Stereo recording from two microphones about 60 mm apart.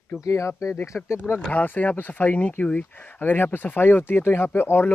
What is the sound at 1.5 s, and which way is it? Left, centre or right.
Speech, left.